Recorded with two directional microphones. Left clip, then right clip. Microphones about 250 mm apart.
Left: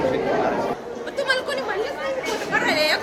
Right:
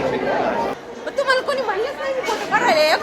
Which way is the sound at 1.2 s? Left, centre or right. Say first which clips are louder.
Right 4 dB; centre.